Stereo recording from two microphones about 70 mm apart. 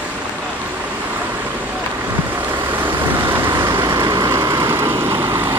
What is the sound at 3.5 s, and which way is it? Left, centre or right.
Vehicle, right.